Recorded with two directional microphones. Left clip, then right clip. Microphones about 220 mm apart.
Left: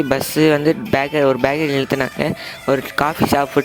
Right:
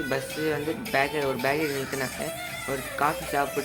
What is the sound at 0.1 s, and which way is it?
Speech, 50° left (ahead or behind).